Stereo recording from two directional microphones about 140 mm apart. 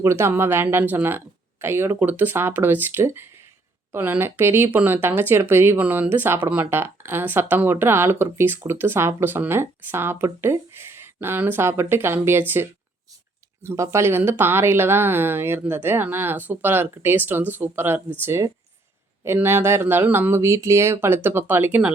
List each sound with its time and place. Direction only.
0.0 s speech: 20° right (ahead or behind)